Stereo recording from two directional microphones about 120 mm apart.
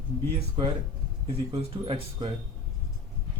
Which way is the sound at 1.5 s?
40° right (ahead or behind).